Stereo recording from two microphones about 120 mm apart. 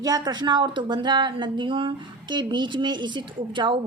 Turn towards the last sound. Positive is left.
turn(degrees=-40)  # may be behind; listen again after turning